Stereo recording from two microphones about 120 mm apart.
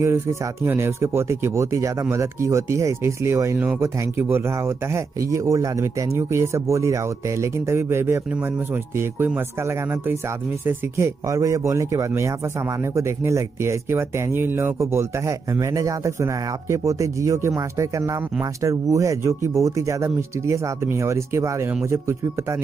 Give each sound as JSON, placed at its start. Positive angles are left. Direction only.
{"t": 0.0, "sound": "speech", "side_deg": -20}